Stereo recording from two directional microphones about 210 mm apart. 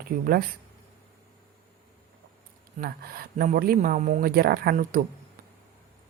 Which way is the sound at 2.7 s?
45° right (ahead or behind).